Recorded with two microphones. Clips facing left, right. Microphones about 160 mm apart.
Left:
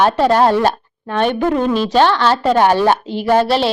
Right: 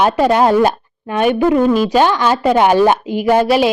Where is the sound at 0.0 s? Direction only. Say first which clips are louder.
Even; 10° right (ahead or behind).